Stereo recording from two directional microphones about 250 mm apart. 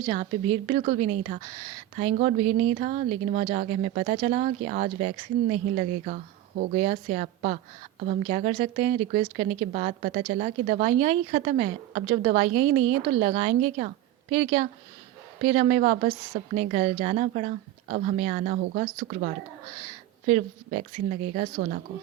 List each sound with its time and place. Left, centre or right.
0.1 s a woman's voice: right